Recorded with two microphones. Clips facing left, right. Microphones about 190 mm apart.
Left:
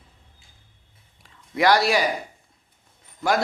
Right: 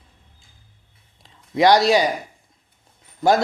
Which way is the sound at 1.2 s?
25° right (ahead or behind).